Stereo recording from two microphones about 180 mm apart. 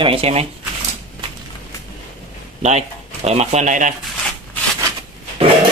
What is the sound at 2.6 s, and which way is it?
Speech, 35° right (ahead or behind).